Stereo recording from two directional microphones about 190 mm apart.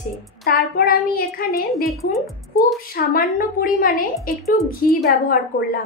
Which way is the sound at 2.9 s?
50° left (ahead or behind).